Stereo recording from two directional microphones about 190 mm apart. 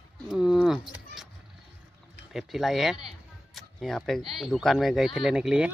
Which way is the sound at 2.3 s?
Centre (ahead or behind).